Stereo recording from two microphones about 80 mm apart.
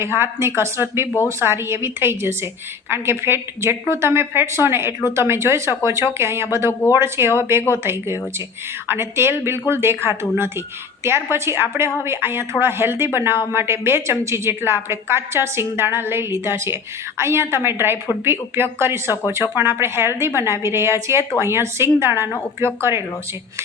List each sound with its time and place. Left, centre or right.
0.0 s a woman's voice: right